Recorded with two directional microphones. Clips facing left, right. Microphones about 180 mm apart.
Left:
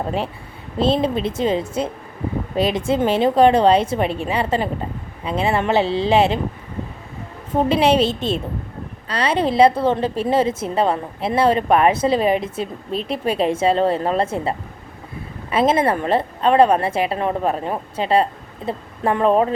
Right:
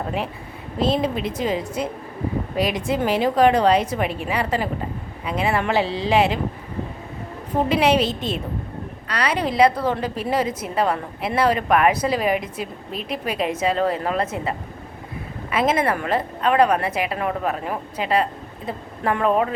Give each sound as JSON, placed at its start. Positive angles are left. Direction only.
{"t": 0.8, "sound": "a woman's voice", "side_deg": 30}
{"t": 7.7, "sound": "a woman's voice", "side_deg": 30}